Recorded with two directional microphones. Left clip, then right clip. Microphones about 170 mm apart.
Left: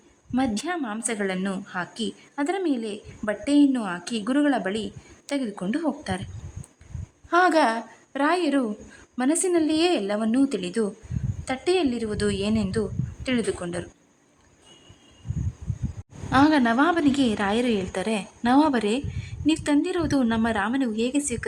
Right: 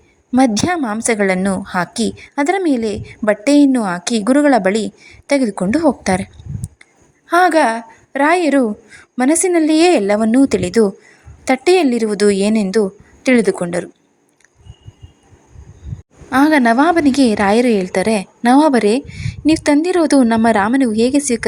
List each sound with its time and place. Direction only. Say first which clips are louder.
0.3 s a woman's voice: right 12 dB; 40° right (ahead or behind)
7.3 s a woman's voice: right 8 dB; 30° right (ahead or behind)
16.3 s a woman's voice: right 8 dB; 25° right (ahead or behind)